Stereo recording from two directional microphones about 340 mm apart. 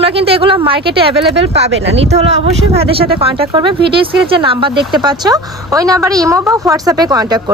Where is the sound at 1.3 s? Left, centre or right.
Right.